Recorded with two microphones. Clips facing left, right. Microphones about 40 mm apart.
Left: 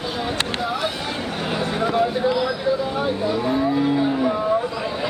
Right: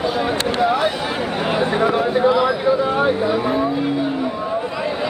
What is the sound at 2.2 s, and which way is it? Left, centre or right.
Vehicle, right.